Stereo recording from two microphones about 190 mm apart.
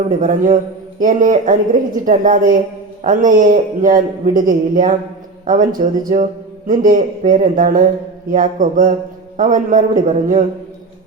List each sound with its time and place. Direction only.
0.2 s a man's voice: 40° right (ahead or behind)